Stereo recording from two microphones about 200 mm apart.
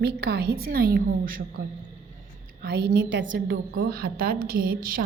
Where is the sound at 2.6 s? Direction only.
55° right (ahead or behind); by 3.5 s 70° right (ahead or behind).